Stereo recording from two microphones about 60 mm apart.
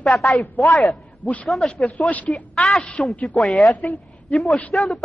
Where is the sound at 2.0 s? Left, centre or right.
Left.